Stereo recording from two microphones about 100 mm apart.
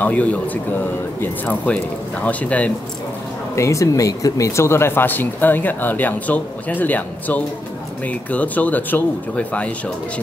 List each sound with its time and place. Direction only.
0.0 s speech: 15° left (ahead or behind)
3.5 s speech: 30° left (ahead or behind); by 9.7 s 15° left (ahead or behind)